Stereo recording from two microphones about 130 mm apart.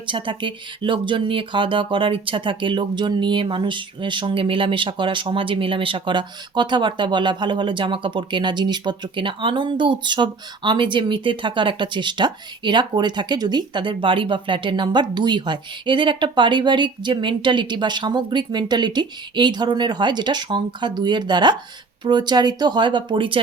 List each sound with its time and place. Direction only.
0.1 s speech: 40° right (ahead or behind)